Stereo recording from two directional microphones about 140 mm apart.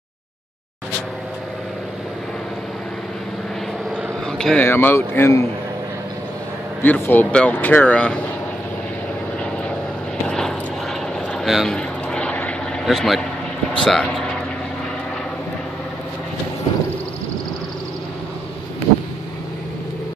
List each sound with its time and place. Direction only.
4.3 s speech: 5° left (ahead or behind)
4.6 s speech: 15° left (ahead or behind)
6.8 s speech: 15° left (ahead or behind)
10.2 s vehicle: 5° left (ahead or behind)
12.8 s speech: centre (ahead or behind)